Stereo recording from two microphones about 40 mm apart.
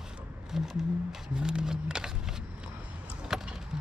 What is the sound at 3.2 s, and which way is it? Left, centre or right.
Vehicle, centre.